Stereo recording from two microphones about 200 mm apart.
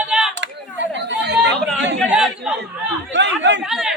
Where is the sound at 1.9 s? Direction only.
Centre (ahead or behind).